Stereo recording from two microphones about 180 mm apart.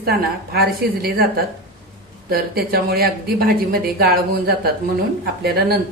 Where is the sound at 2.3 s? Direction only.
60° right (ahead or behind).